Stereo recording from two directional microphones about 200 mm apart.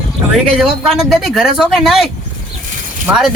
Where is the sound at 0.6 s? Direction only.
Centre (ahead or behind).